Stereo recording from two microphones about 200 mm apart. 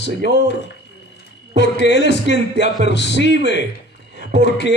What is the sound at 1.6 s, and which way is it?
Speech, 60° left (ahead or behind).